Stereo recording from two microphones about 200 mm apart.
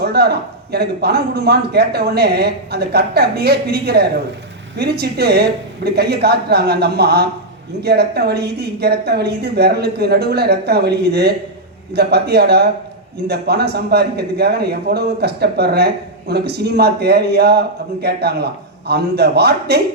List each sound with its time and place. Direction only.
0.0 s a man's voice: 55° right (ahead or behind)